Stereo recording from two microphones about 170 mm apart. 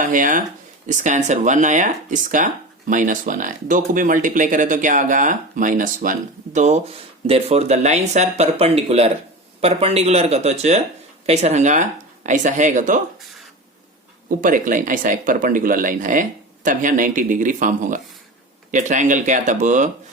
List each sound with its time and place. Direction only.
0.0 s speech: 50° right (ahead or behind)
14.3 s speech: 50° right (ahead or behind)